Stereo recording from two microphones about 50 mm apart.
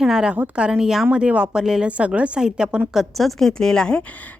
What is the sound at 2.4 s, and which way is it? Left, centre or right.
Speech, centre.